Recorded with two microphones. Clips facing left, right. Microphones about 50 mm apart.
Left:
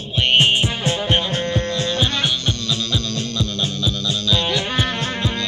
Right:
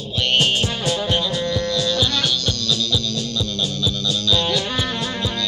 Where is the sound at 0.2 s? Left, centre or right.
Left.